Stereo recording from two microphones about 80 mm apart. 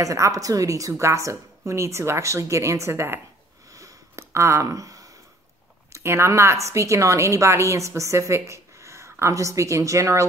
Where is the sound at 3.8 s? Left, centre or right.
Right.